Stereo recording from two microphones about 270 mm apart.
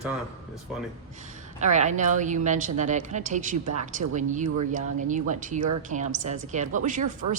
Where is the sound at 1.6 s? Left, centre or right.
Right.